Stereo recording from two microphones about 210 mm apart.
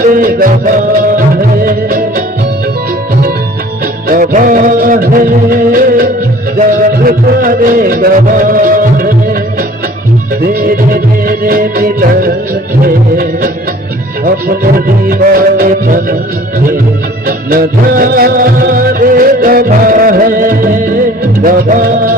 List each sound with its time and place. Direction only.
0.0 s music: 40° right (ahead or behind)
4.1 s music: 40° right (ahead or behind)
17.2 s music: 45° right (ahead or behind)